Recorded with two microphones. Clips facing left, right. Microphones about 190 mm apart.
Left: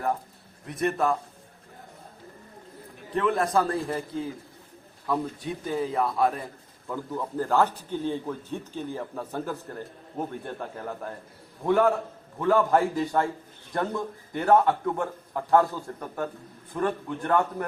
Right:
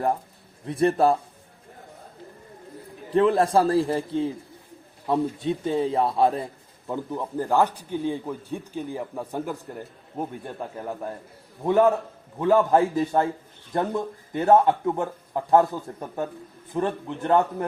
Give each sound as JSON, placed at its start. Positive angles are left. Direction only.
{"t": 0.7, "sound": "a man's voice", "side_deg": -30}
{"t": 3.1, "sound": "a man's voice", "side_deg": -30}
{"t": 7.1, "sound": "a man's voice", "side_deg": -15}